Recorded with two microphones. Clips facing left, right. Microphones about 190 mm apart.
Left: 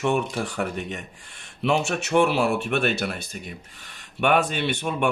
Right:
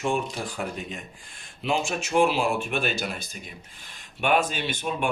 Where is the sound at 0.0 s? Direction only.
70° left (ahead or behind).